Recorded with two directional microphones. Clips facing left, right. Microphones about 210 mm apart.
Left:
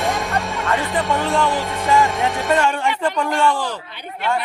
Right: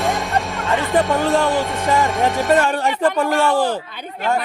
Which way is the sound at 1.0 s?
Centre (ahead or behind).